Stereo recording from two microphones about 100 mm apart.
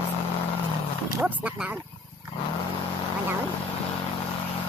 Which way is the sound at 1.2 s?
10° right (ahead or behind).